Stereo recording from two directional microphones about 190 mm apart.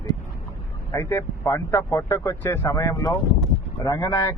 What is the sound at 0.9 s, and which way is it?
Speech, 15° left (ahead or behind).